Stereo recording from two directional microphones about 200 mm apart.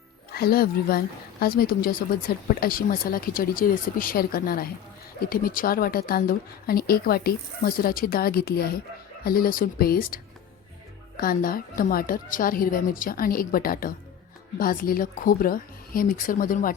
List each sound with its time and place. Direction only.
0.3 s a woman's voice: 50° left (ahead or behind)
11.2 s a woman's voice: 45° left (ahead or behind)